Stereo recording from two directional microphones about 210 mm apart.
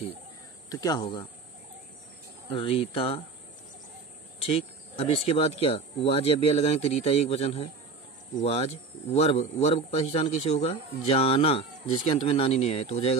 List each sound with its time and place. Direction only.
0.7 s speech: 20° left (ahead or behind)
2.5 s speech: 25° left (ahead or behind)
4.4 s speech: 25° left (ahead or behind)